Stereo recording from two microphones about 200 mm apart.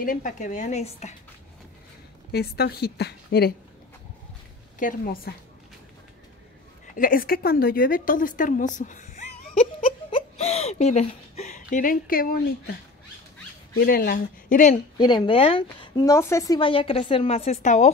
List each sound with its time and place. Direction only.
0.0 s speech: 40° left (ahead or behind)
2.3 s a woman's voice: 55° left (ahead or behind)
4.7 s a woman's voice: 45° left (ahead or behind)
7.0 s a woman's voice: 45° left (ahead or behind)
13.7 s a woman's voice: 50° left (ahead or behind)
15.0 s speech: 20° left (ahead or behind)
16.0 s speech: 15° left (ahead or behind); by 17.8 s 35° left (ahead or behind)